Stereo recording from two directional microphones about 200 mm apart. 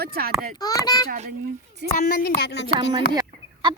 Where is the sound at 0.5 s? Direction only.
20° left (ahead or behind).